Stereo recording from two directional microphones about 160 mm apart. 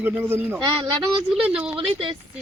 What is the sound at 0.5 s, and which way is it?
Speech, 30° right (ahead or behind).